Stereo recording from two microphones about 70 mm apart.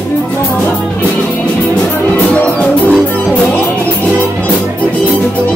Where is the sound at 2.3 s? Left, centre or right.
Centre.